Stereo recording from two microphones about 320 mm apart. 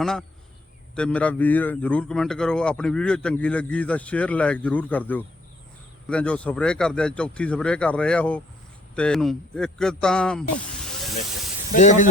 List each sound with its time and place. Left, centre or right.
0.0 s a man's voice: centre
11.7 s speech: left